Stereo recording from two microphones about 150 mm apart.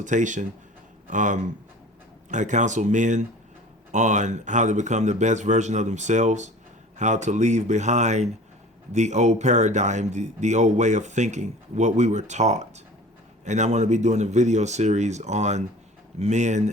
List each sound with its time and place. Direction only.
0.0 s speech: 55° right (ahead or behind)